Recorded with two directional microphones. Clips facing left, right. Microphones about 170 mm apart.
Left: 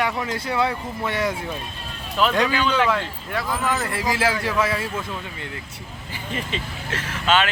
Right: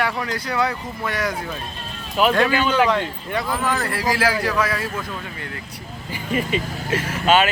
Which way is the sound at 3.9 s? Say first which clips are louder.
Right 2 dB; 20° left (ahead or behind).